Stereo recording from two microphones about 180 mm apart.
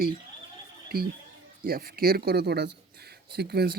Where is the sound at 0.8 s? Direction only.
55° right (ahead or behind).